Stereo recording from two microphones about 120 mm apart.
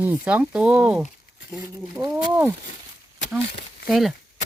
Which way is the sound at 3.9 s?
Centre (ahead or behind).